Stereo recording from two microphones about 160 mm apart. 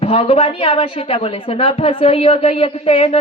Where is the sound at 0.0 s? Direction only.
35° left (ahead or behind).